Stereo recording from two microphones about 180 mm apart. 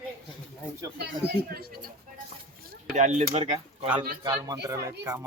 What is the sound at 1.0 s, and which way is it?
Speech, 60° right (ahead or behind).